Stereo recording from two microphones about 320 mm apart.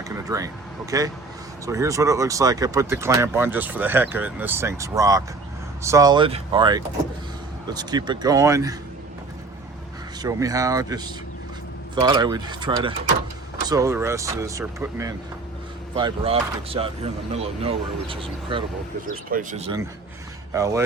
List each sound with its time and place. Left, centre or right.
0.0 s speech: centre
10.2 s speech: centre